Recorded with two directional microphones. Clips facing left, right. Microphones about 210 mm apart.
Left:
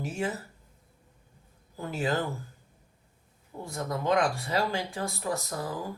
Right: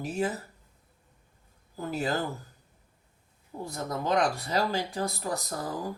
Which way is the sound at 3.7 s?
35° right (ahead or behind).